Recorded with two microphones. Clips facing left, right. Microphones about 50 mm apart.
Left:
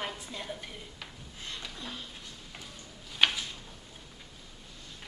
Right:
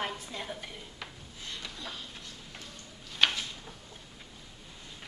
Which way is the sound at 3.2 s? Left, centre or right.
Centre.